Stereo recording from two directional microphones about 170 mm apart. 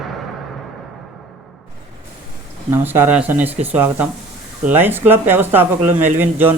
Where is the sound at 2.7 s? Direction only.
15° right (ahead or behind).